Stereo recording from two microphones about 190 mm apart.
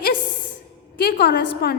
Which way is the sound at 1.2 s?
55° left (ahead or behind).